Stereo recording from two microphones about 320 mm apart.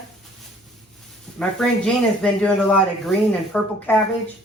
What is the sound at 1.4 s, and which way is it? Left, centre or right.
Speech, centre.